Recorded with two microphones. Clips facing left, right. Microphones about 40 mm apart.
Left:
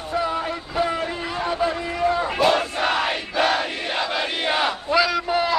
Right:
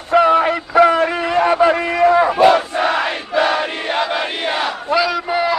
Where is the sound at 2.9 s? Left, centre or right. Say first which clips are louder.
Right 5 dB; right.